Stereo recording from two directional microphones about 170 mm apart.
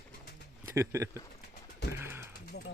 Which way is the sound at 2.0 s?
15° right (ahead or behind).